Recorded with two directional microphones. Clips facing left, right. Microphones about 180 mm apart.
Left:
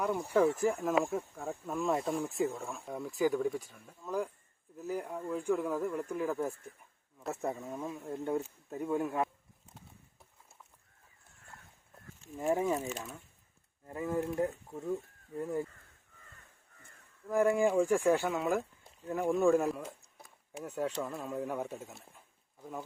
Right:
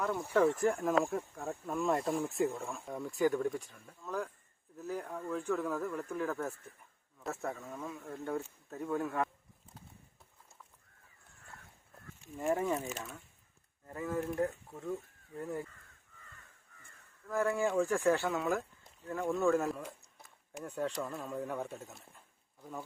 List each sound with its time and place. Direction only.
0.0 s speech: 15° left (ahead or behind)
12.4 s speech: 5° left (ahead or behind)
13.8 s speech: 20° left (ahead or behind)
17.2 s speech: 15° left (ahead or behind)
19.6 s a sound: centre (ahead or behind)
21.0 s speech: 5° left (ahead or behind)